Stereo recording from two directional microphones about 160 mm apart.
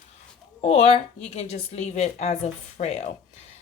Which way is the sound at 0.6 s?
40° left (ahead or behind).